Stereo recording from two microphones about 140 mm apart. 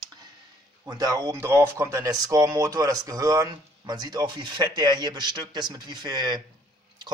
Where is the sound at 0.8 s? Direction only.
25° right (ahead or behind).